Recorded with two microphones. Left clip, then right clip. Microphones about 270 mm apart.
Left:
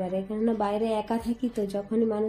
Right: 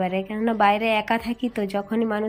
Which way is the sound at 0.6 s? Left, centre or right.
Right.